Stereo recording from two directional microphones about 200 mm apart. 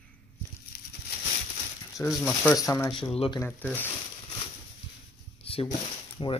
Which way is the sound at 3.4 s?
10° left (ahead or behind).